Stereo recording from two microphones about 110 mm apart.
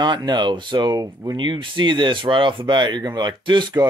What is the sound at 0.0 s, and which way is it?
Speech, 40° right (ahead or behind).